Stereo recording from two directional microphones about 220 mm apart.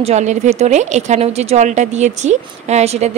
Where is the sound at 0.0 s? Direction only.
30° right (ahead or behind).